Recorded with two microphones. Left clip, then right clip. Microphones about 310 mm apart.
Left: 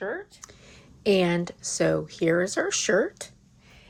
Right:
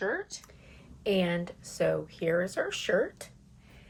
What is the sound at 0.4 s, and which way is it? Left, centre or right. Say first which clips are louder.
Speech: left 6 dB; left.